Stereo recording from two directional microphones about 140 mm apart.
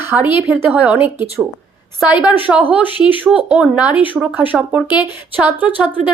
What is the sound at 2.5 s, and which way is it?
Speech, centre (ahead or behind).